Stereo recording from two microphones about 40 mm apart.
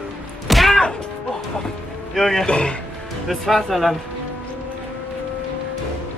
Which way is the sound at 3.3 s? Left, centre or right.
Centre.